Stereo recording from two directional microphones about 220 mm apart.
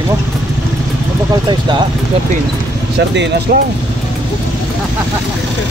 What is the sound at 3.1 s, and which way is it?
Speech, 55° right (ahead or behind).